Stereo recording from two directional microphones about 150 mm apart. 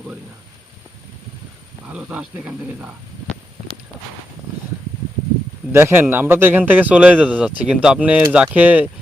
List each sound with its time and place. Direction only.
1.9 s a man's voice: 10° right (ahead or behind)
5.7 s a man's voice: 15° right (ahead or behind)